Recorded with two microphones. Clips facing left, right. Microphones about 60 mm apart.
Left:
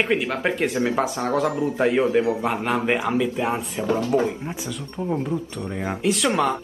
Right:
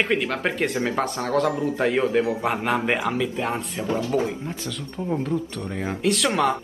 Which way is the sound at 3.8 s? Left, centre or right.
Left.